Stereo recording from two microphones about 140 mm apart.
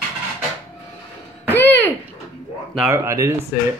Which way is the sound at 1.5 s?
15° left (ahead or behind).